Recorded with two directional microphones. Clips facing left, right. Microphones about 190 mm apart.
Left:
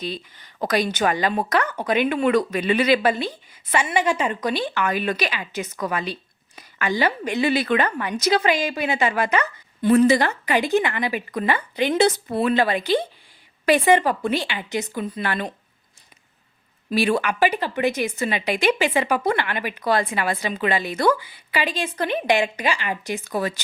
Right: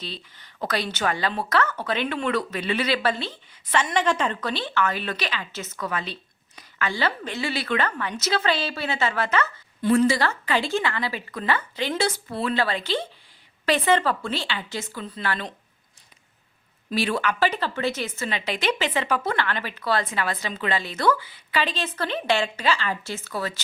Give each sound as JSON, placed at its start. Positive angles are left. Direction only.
{"t": 0.0, "sound": "a woman's voice", "side_deg": 15}
{"t": 16.9, "sound": "a woman's voice", "side_deg": 10}